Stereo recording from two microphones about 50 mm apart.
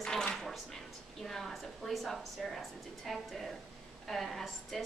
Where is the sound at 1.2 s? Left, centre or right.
Centre.